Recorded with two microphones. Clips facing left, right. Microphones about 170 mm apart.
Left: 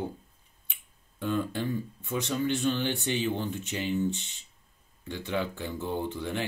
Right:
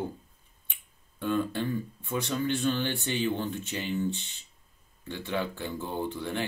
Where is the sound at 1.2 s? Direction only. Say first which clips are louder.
Right 1 dB; 15° left (ahead or behind).